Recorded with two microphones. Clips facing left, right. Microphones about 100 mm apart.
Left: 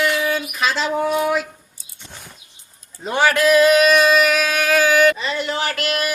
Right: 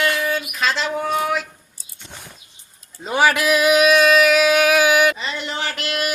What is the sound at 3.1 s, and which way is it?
Speech, 10° right (ahead or behind).